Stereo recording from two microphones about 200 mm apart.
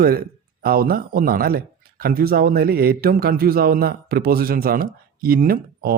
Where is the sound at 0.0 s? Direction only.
50° right (ahead or behind).